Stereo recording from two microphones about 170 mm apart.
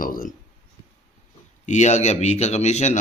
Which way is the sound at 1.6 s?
45° left (ahead or behind).